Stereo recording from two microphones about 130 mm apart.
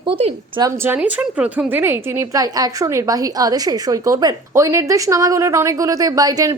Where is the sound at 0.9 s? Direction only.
10° right (ahead or behind).